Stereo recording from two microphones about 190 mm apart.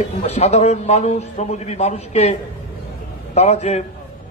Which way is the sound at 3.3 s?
35° left (ahead or behind).